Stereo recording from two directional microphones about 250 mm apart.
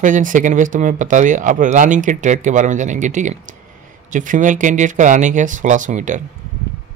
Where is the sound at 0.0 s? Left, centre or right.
Right.